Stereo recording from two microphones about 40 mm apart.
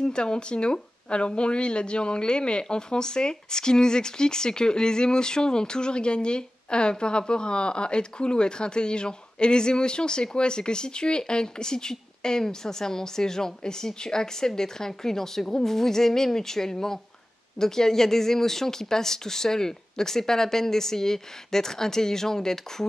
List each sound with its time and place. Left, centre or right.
0.0 s speech: left